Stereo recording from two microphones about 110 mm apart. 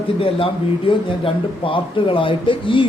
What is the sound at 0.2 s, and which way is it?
Speech, 55° left (ahead or behind).